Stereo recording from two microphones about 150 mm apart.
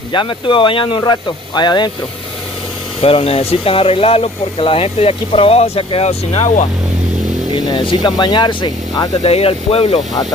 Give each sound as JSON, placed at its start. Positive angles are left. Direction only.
{"t": 0.1, "sound": "speech", "side_deg": 30}
{"t": 3.0, "sound": "speech", "side_deg": 40}
{"t": 7.5, "sound": "speech", "side_deg": 30}
{"t": 9.2, "sound": "speech", "side_deg": 40}